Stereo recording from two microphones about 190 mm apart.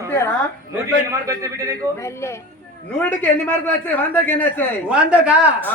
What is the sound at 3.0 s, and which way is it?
A man's voice, 10° left (ahead or behind).